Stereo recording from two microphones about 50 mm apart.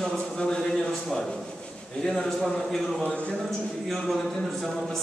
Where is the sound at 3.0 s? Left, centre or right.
Left.